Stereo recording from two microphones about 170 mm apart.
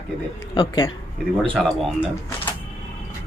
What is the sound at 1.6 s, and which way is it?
Speech, centre (ahead or behind).